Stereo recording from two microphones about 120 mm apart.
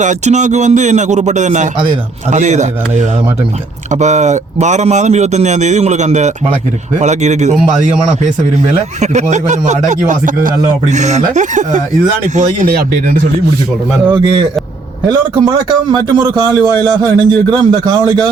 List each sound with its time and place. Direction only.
0.0 s speech: 90° right
2.3 s speech: 80° right
4.0 s speech: 75° right (ahead or behind)
9.0 s speech: 80° right
14.1 s a man's voice: 40° right (ahead or behind)